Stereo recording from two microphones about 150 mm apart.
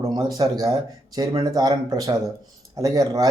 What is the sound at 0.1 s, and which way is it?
Speech, 25° right (ahead or behind).